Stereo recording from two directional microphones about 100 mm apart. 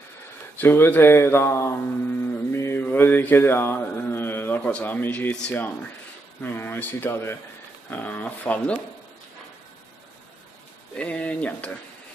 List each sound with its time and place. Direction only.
0.6 s speech: 20° left (ahead or behind)
2.5 s mantra: 25° left (ahead or behind)
4.6 s speech: 15° left (ahead or behind)
11.0 s speech: 10° left (ahead or behind)